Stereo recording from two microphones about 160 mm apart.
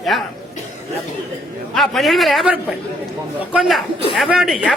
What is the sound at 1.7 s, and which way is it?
A man's voice, centre (ahead or behind).